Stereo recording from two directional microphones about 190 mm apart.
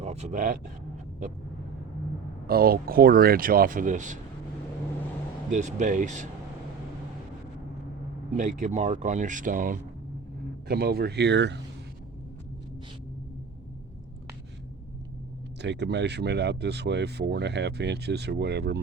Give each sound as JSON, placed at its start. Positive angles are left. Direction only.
{"t": 0.0, "sound": "speech", "side_deg": -35}
{"t": 2.5, "sound": "speech", "side_deg": -50}
{"t": 5.5, "sound": "speech", "side_deg": -40}
{"t": 8.4, "sound": "speech", "side_deg": -40}
{"t": 10.7, "sound": "speech", "side_deg": -55}
{"t": 15.6, "sound": "speech", "side_deg": -65}